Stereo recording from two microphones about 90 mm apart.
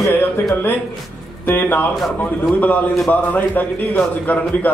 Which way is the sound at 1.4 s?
20° left (ahead or behind).